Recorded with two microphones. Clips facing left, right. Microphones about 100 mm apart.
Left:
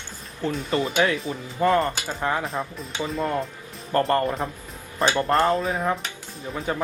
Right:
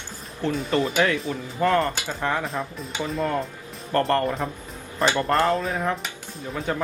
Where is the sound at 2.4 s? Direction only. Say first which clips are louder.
Even; centre (ahead or behind).